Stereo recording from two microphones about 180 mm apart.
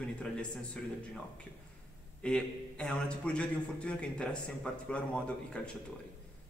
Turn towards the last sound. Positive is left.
turn(degrees=5)  # may be behind; listen again after turning